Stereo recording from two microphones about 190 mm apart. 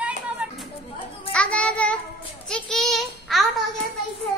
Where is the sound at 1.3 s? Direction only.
5° left (ahead or behind).